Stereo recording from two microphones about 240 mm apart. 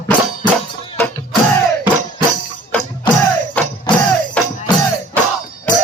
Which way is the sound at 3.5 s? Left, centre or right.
Centre.